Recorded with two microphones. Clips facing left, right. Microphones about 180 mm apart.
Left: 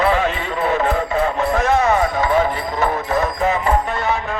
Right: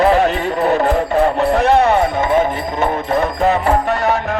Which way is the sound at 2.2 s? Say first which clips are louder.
Right 2 dB; 25° right (ahead or behind).